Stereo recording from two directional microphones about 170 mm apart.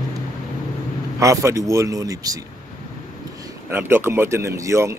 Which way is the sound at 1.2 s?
15° right (ahead or behind).